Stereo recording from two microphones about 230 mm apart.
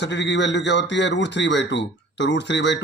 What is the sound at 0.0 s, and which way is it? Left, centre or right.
Speech, left.